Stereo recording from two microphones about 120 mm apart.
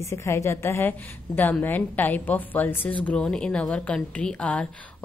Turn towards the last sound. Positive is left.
turn(degrees=10)  # may be behind; listen again after turning